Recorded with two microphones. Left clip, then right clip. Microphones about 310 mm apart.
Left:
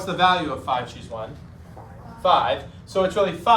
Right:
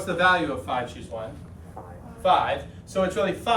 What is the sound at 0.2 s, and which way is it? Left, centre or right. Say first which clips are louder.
Speech: left 2 dB; centre.